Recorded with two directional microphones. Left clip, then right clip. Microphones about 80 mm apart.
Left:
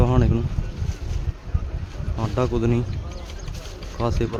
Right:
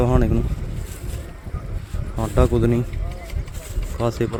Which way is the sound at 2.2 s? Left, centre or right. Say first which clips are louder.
Right 4 dB; right.